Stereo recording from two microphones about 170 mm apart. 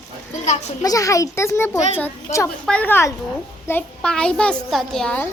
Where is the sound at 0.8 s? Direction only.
20° left (ahead or behind).